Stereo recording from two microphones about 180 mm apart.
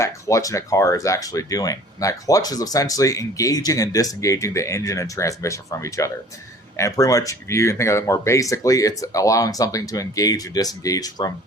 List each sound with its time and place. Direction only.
0.0 s speech: 15° left (ahead or behind)